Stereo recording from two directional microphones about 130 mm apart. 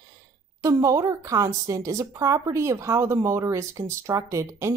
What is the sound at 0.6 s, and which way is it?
Speech, 25° right (ahead or behind).